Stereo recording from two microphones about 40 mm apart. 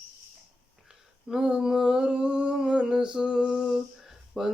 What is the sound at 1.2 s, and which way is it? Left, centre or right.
Mantra, centre.